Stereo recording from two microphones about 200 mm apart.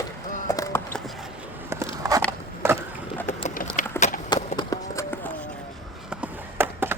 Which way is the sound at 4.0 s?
10° left (ahead or behind).